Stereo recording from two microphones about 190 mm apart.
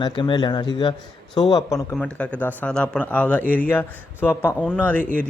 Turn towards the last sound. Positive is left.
turn(degrees=5)  # may be behind; listen again after turning